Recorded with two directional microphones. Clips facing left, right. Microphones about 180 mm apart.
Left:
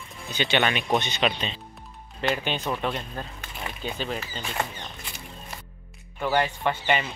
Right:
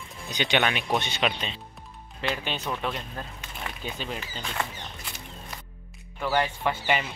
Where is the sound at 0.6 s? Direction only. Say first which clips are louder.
Left 2 dB; centre (ahead or behind).